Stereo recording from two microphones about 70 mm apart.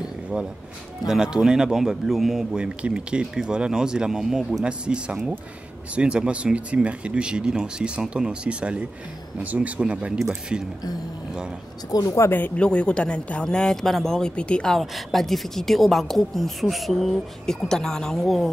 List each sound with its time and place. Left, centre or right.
1.0 s speech: centre
11.9 s speech: left
12.3 s speech: left
12.5 s speech: centre
14.7 s a woman's voice: centre